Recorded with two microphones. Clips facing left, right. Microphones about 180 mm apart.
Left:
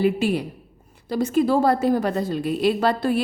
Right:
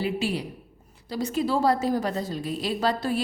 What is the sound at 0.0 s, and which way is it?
A woman's voice, 55° left (ahead or behind).